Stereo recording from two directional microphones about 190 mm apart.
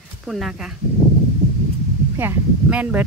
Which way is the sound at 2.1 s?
10° right (ahead or behind).